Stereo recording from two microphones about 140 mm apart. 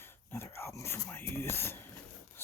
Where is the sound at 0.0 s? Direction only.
15° left (ahead or behind).